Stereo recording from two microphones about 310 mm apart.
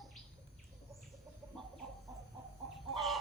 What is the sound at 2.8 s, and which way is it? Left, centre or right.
Chicken, centre.